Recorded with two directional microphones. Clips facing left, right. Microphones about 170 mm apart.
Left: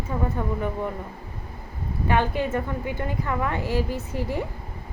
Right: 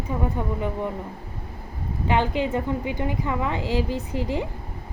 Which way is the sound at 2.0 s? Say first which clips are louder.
Right 1 dB; 20° right (ahead or behind).